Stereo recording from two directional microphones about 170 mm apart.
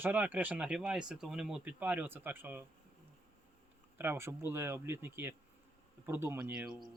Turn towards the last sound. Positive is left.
turn(degrees=-5)  # may be behind; listen again after turning